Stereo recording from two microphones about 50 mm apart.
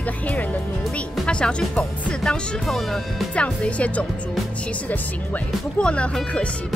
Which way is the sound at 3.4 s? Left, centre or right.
Left.